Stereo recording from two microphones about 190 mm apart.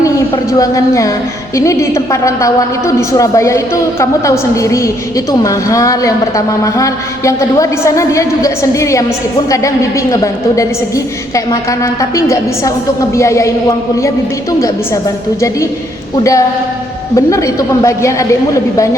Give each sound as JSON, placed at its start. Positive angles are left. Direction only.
{"t": 0.6, "sound": "a woman's voice", "side_deg": 15}
{"t": 16.1, "sound": "a woman's voice", "side_deg": 15}